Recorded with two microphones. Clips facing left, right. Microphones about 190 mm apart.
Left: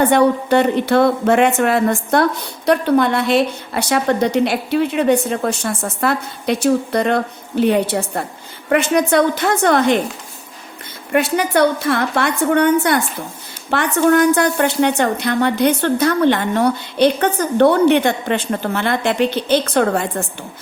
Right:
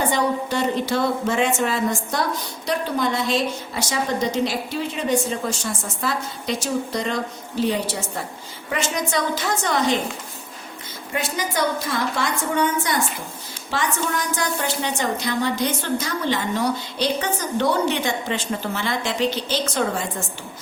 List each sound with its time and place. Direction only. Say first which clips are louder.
0.0 s a woman's voice: left 8 dB; 60° left (ahead or behind)
11.1 s a woman's voice: left 10 dB; 65° left (ahead or behind)